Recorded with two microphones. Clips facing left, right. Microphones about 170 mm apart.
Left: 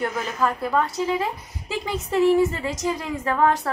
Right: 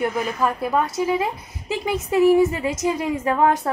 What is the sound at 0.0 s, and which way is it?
A woman's voice, 15° right (ahead or behind).